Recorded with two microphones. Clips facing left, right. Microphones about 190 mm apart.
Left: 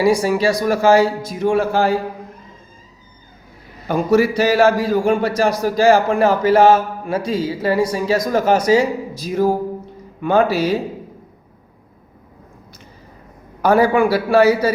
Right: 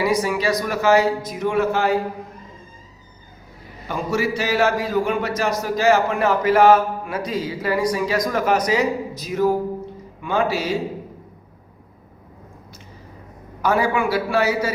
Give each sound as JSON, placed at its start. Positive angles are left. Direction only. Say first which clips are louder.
{"t": 0.0, "sound": "a man's voice", "louder": "left 5 dB", "side_deg": 30}
{"t": 3.8, "sound": "a man's voice", "louder": "left 7 dB", "side_deg": 40}
{"t": 10.2, "sound": "speech", "louder": "left 6 dB", "side_deg": 45}
{"t": 13.6, "sound": "a man's voice", "louder": "left 6 dB", "side_deg": 35}